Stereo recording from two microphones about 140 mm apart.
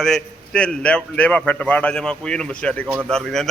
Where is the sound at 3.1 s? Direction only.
5° left (ahead or behind).